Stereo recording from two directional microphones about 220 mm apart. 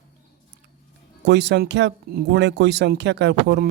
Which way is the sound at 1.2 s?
50° right (ahead or behind).